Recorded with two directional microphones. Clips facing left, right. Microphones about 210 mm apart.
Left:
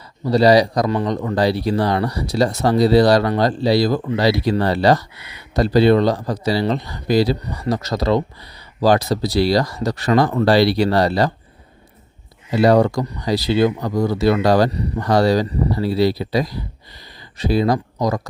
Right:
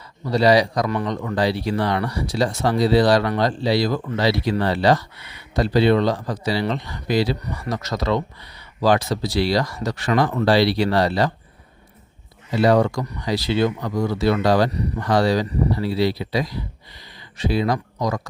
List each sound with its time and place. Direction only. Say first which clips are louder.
0.3 s speech: left 3 dB; 35° left (ahead or behind)
12.5 s speech: left 3 dB; 40° left (ahead or behind)